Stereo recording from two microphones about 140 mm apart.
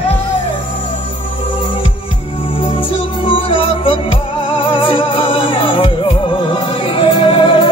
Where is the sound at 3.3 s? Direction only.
40° left (ahead or behind).